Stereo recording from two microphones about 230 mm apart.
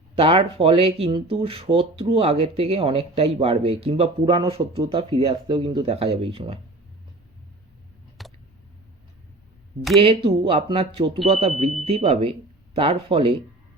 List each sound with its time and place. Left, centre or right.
0.2 s speech: right
8.2 s a sound: centre
10.0 s speech: right